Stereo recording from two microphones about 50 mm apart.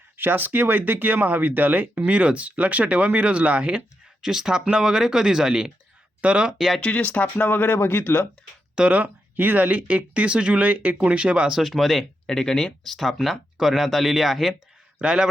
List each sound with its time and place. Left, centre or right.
0.2 s speech: right
4.2 s speech: centre
6.7 s speech: left
8.7 s speech: right
9.0 s speech: right
11.5 s speech: centre
14.9 s a man's voice: centre